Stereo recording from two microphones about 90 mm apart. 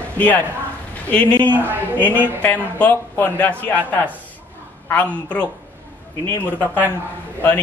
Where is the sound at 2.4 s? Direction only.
20° left (ahead or behind).